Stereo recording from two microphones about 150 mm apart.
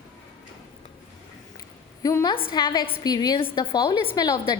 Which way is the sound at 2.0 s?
20° left (ahead or behind).